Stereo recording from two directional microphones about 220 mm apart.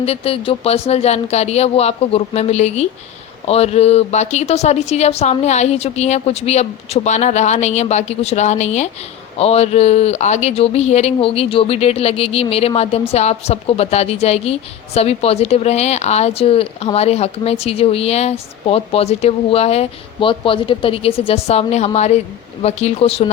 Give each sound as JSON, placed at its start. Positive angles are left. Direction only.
{"t": 0.0, "sound": "speech", "side_deg": 25}